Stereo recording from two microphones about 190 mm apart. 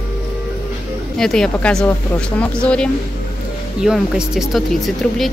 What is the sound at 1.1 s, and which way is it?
Speech, 5° left (ahead or behind).